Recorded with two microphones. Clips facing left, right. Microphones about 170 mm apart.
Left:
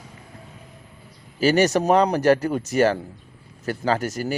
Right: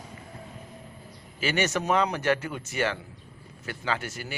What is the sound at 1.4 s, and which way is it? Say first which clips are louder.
Speech: left 9 dB; 40° left (ahead or behind).